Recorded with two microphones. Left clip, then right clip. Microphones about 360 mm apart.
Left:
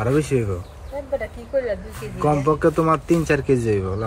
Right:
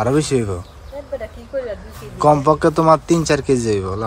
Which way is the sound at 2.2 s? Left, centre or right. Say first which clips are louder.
Right 5 dB; centre.